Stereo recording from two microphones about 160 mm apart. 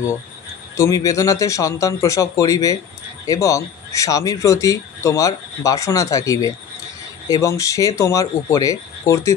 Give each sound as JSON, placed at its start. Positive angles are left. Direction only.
{"t": 0.7, "sound": "speech", "side_deg": 20}